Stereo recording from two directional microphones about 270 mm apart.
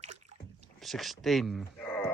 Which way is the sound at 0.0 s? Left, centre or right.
Right.